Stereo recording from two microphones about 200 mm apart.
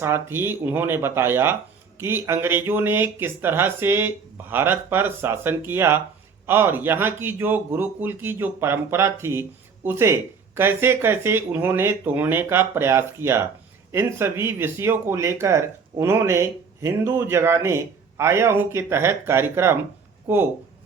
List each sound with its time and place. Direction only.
0.0 s speech: 10° right (ahead or behind)